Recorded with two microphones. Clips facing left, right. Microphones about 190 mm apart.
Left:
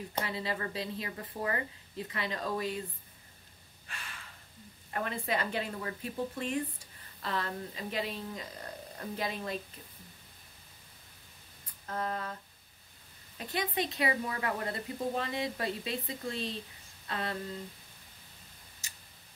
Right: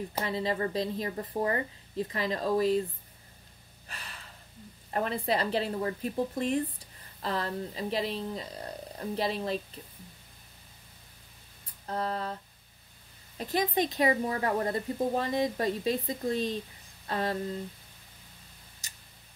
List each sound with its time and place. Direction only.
0.2 s a woman's voice: 35° right (ahead or behind)
3.8 s gasp: 35° right (ahead or behind)
4.9 s a woman's voice: 35° right (ahead or behind)
11.8 s a sound: 35° right (ahead or behind)
13.4 s a woman's voice: 35° right (ahead or behind)